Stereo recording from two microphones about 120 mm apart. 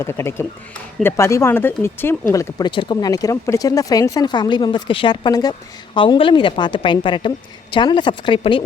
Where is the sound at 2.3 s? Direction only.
30° left (ahead or behind).